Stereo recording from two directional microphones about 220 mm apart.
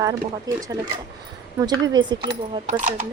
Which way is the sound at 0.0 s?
15° right (ahead or behind).